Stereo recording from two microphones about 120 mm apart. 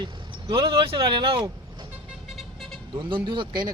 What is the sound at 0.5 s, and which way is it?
Speech, 50° right (ahead or behind).